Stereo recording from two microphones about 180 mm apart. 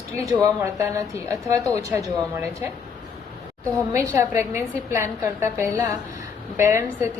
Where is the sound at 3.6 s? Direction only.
15° right (ahead or behind).